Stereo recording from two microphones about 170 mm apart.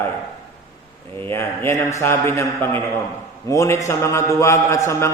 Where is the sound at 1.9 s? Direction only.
15° left (ahead or behind).